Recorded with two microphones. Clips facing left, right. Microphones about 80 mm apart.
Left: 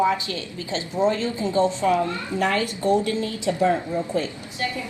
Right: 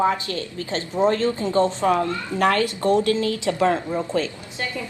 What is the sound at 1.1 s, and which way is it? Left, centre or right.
Speech, right.